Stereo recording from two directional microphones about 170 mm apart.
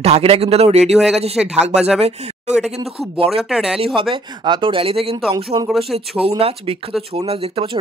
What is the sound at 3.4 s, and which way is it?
Speech, 5° right (ahead or behind).